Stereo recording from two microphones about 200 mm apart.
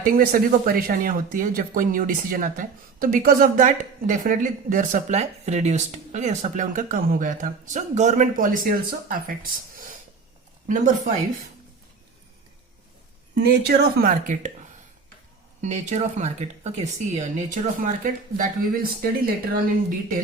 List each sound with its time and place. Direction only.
0.0 s speech: 45° right (ahead or behind)
13.4 s speech: 55° right (ahead or behind)
15.6 s speech: 35° right (ahead or behind)